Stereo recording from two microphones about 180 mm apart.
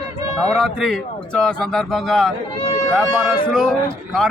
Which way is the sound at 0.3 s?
5° left (ahead or behind).